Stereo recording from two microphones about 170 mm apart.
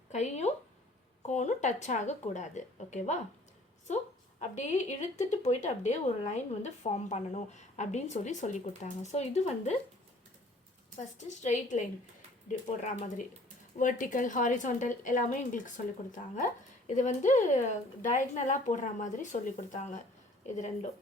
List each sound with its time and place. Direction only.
0.1 s speech: 40° left (ahead or behind)
11.3 s speech: 45° left (ahead or behind)